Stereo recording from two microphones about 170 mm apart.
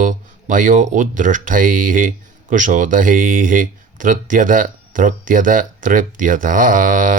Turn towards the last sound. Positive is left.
turn(degrees=-50)  # may be behind; listen again after turning